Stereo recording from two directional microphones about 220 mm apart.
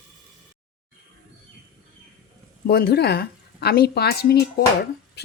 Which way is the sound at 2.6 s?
45° left (ahead or behind).